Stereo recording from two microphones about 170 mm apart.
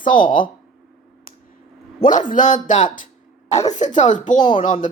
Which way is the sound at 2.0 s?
50° left (ahead or behind).